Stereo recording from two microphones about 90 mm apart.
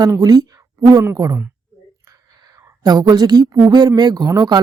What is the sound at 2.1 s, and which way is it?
Whispering, 40° right (ahead or behind).